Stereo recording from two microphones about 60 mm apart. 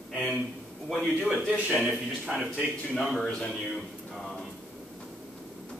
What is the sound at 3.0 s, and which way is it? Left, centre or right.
Speech, centre.